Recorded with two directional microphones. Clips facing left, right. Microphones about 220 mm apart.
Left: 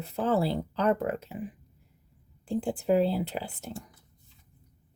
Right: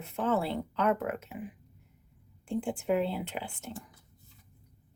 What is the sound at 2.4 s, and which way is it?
Speech, 35° left (ahead or behind).